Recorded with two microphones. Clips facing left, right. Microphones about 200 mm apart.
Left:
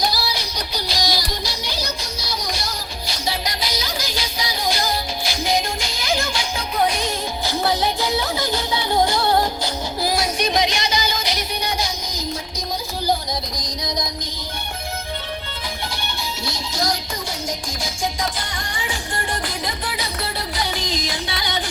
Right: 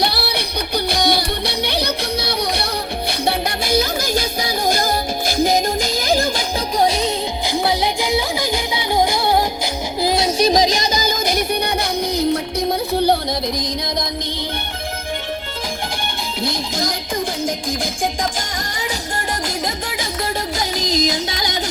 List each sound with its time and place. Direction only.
0.0 s music: 65° right (ahead or behind); by 7.0 s 30° right (ahead or behind)
7.4 s music: 15° right (ahead or behind)
10.0 s music: 25° right (ahead or behind); by 13.1 s 65° right (ahead or behind)
16.4 s music: 55° right (ahead or behind)
18.0 s music: 50° right (ahead or behind)
20.6 s music: 40° right (ahead or behind)